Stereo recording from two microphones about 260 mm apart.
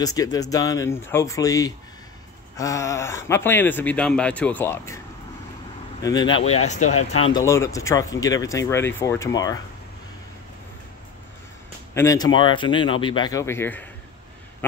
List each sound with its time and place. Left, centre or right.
0.0 s speech: centre
6.0 s speech: centre
7.3 s speech: centre
11.9 s speech: centre
14.6 s a sound: centre